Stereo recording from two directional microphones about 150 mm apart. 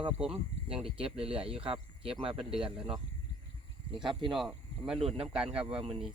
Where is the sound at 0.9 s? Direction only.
40° right (ahead or behind).